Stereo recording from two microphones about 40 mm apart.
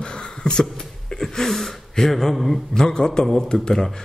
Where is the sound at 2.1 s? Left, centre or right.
Centre.